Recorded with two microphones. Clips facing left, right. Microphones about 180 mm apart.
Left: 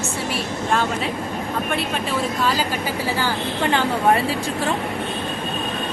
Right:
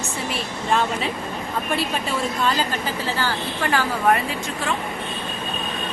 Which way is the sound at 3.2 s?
20° left (ahead or behind).